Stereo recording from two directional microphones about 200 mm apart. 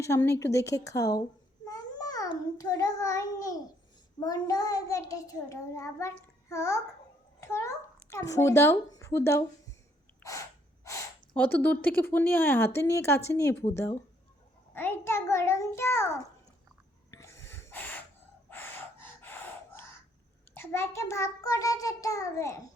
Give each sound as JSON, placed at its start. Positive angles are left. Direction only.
{"t": 0.0, "sound": "speech", "side_deg": 15}
{"t": 1.6, "sound": "a sound", "side_deg": 20}
{"t": 4.2, "sound": "a child's voice", "side_deg": 20}
{"t": 10.8, "sound": "speech", "side_deg": 10}
{"t": 14.7, "sound": "speech", "side_deg": 10}
{"t": 17.1, "sound": "gasp", "side_deg": 15}
{"t": 18.4, "sound": "a sound", "side_deg": 10}
{"t": 20.5, "sound": "speech", "side_deg": 10}